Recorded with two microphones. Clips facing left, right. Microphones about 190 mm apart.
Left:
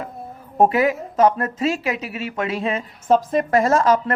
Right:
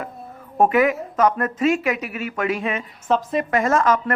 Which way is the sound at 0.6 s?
30° left (ahead or behind).